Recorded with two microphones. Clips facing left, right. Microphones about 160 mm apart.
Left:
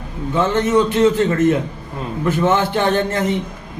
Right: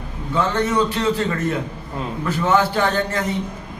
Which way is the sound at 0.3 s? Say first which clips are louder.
Left 4 dB; 25° left (ahead or behind).